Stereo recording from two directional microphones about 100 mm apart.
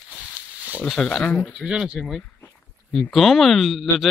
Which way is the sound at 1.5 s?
10° right (ahead or behind).